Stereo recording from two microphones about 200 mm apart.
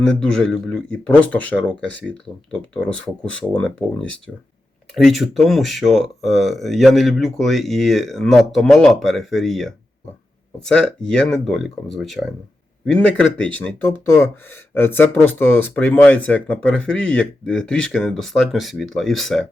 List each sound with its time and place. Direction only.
0.0 s speech: 5° left (ahead or behind)
1.9 s speech: 65° left (ahead or behind)
2.7 s speech: 5° left (ahead or behind)
5.0 s speech: centre (ahead or behind)